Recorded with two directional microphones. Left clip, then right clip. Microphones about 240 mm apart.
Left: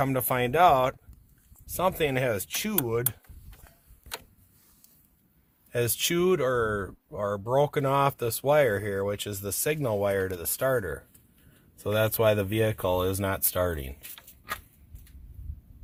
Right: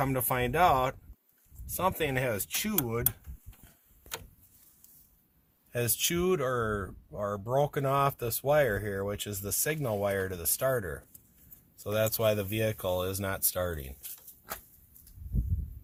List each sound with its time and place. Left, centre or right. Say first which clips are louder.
0.0 s speech: left 3 dB; left
5.7 s speech: left 4 dB; left